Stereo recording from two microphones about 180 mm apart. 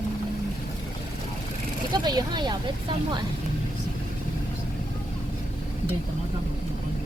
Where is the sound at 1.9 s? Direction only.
25° right (ahead or behind).